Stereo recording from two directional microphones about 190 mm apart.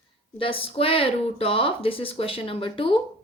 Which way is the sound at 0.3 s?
30° left (ahead or behind).